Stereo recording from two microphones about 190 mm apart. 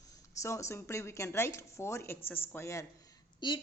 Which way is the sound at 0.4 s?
15° left (ahead or behind).